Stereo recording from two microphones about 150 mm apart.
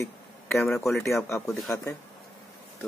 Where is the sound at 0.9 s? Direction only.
Centre (ahead or behind).